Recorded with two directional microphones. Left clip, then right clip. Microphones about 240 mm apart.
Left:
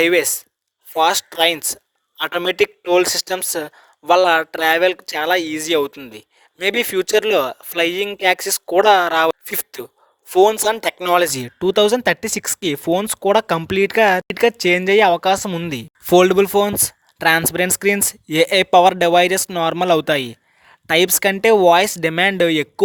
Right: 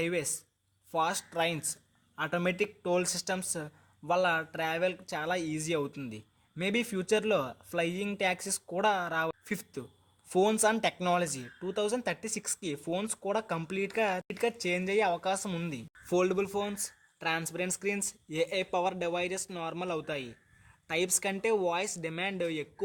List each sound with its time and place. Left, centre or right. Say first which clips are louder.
0.0 s speech: left 18 dB; left